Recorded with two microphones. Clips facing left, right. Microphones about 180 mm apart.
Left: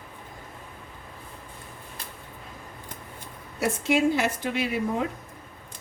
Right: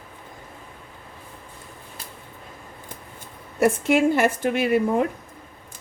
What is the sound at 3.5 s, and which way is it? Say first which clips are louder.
A woman's voice: right 5 dB; 55° right (ahead or behind).